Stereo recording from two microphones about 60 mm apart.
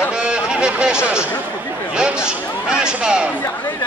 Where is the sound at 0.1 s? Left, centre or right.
Centre.